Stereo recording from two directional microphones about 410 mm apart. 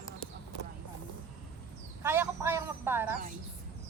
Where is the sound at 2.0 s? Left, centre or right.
Centre.